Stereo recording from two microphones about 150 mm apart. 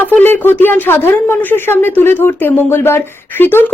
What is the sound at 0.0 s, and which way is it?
Speech, 10° left (ahead or behind).